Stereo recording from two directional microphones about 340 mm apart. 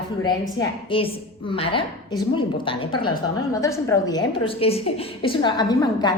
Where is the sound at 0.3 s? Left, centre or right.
Centre.